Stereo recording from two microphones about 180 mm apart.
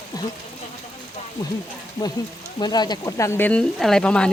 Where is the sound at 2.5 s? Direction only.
25° left (ahead or behind); by 4.2 s 5° left (ahead or behind).